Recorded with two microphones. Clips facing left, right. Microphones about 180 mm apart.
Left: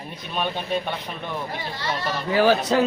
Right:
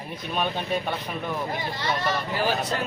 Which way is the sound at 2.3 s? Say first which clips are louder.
Left 12 dB; 80° left.